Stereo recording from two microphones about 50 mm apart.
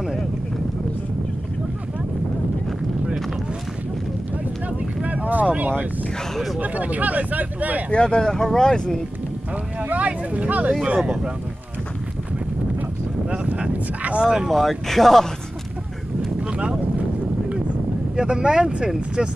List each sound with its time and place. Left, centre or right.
4.6 s boat: right
5.6 s speech: right
7.9 s speech: centre
9.8 s speech: right
13.5 s speech: right
14.2 s speech: centre
14.5 s speech: centre
16.3 s speech: right
18.1 s speech: centre